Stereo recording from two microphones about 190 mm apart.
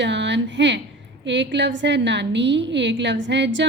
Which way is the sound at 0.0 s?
70° right (ahead or behind).